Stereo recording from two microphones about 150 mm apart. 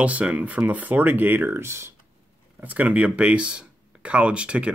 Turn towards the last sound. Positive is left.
turn(degrees=-5)  # may be behind; listen again after turning